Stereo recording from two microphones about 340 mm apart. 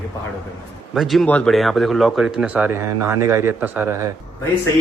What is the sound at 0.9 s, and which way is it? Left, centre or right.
Speech, centre.